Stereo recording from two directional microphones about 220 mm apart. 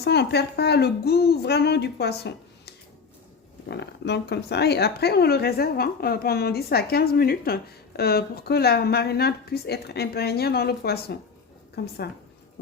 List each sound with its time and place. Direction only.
0.0 s speech: 50° left (ahead or behind)